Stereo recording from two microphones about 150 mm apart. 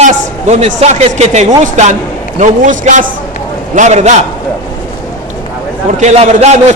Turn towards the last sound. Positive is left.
turn(degrees=-50)  # may be behind; listen again after turning